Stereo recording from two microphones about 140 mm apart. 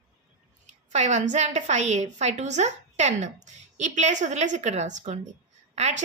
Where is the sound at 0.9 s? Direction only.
55° right (ahead or behind).